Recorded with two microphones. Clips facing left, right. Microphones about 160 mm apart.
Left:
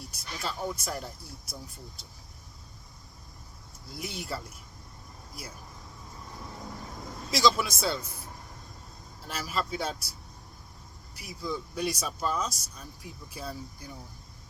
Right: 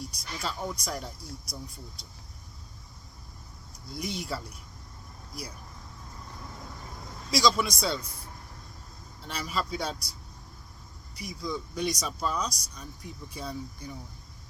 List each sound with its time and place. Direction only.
0.0 s speech: centre (ahead or behind)
3.8 s speech: centre (ahead or behind)
7.3 s speech: centre (ahead or behind)
9.2 s speech: 5° left (ahead or behind)